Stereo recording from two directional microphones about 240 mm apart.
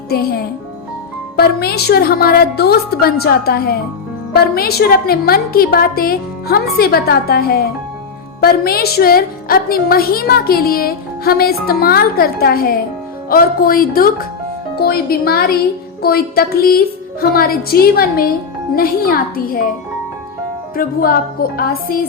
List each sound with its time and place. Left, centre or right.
0.1 s a woman's voice: left
20.7 s a woman's voice: left